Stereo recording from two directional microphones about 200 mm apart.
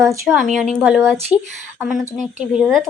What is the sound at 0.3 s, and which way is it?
Speech, centre (ahead or behind).